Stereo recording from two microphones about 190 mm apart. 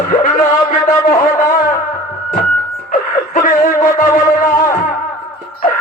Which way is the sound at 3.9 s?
45° left (ahead or behind).